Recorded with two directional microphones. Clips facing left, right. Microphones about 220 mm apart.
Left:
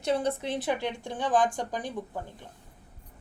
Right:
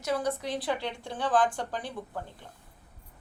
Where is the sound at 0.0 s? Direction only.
25° left (ahead or behind).